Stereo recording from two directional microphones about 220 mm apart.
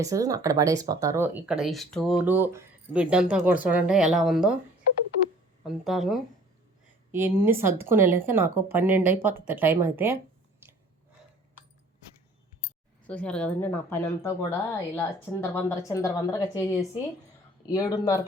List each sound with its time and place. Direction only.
0.0 s speech: 15° right (ahead or behind)
5.6 s speech: centre (ahead or behind)
13.1 s a woman's voice: 5° left (ahead or behind)